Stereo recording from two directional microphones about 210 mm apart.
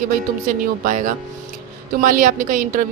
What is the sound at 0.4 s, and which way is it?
A woman's voice, 40° right (ahead or behind).